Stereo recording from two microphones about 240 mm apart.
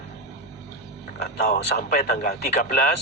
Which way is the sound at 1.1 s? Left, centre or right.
Left.